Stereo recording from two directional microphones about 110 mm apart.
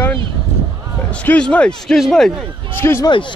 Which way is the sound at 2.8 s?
20° left (ahead or behind).